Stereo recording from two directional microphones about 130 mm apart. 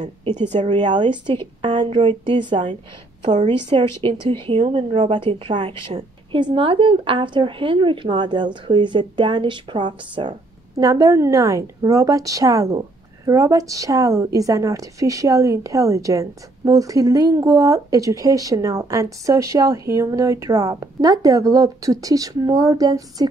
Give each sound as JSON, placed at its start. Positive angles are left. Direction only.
{"t": 0.2, "sound": "speech", "side_deg": -60}
{"t": 0.6, "sound": "a woman's voice", "side_deg": -35}
{"t": 10.8, "sound": "a woman's voice", "side_deg": -25}